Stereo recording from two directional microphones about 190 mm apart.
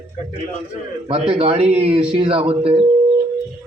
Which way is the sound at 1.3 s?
30° right (ahead or behind).